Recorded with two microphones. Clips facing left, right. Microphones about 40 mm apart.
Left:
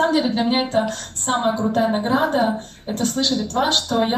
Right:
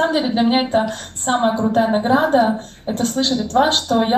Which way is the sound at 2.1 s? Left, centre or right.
Right.